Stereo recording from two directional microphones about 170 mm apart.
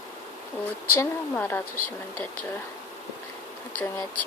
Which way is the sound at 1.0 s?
10° left (ahead or behind).